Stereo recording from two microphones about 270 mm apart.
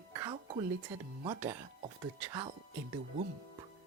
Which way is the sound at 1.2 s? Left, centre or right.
Centre.